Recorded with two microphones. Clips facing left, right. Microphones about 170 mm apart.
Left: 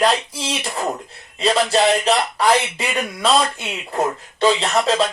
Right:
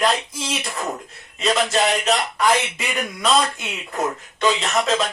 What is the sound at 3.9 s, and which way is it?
A man's voice, 30° left (ahead or behind).